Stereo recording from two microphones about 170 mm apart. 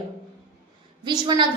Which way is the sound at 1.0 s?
25° right (ahead or behind).